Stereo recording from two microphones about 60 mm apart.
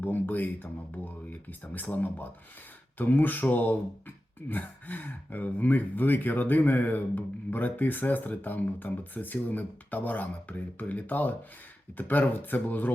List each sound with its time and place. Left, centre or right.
0.0 s speech: left